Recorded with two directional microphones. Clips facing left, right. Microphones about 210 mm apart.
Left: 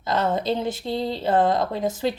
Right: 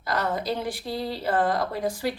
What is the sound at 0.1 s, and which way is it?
Speech, 25° left (ahead or behind).